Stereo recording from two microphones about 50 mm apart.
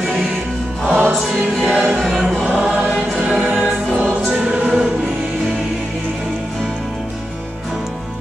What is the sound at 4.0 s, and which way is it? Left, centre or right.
Choir, centre.